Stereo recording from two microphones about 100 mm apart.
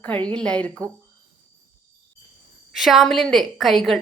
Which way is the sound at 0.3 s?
10° left (ahead or behind).